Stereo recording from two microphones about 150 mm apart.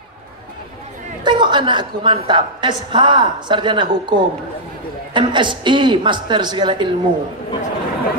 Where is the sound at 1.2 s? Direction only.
30° right (ahead or behind).